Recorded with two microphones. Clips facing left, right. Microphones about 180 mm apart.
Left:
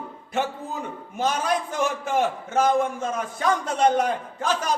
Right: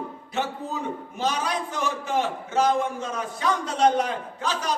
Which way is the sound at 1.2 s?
50° left (ahead or behind).